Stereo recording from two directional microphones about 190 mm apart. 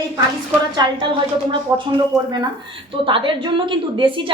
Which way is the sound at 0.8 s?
25° right (ahead or behind).